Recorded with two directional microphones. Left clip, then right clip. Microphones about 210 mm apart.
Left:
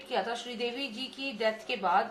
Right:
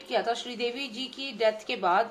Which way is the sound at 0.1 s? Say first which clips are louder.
Right 4 dB; 45° right (ahead or behind).